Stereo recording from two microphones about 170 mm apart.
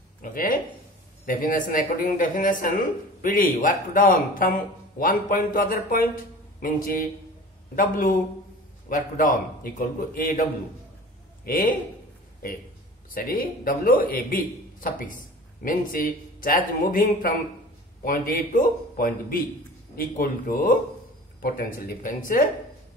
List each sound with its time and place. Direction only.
0.2 s a man's voice: 55° left (ahead or behind)
11.4 s a man's voice: 55° left (ahead or behind)
13.1 s a man's voice: 55° left (ahead or behind)